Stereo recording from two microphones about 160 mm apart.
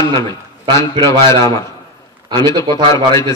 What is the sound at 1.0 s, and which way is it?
Speech, 20° left (ahead or behind).